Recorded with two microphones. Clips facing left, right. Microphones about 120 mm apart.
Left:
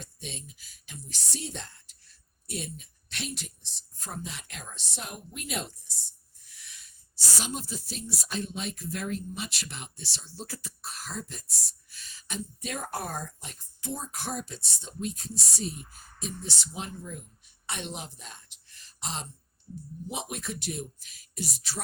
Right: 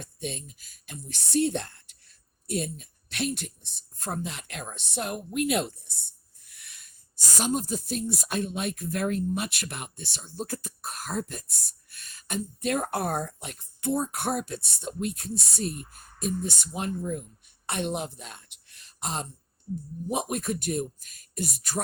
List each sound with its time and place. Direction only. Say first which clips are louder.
0.0 s speech: right 7 dB; 55° right (ahead or behind)
6.4 s owl: even; 55° right (ahead or behind)
7.3 s speech: right 8 dB; 50° right (ahead or behind)